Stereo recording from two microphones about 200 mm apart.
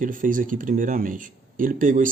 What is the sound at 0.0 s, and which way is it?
Speech, 40° right (ahead or behind).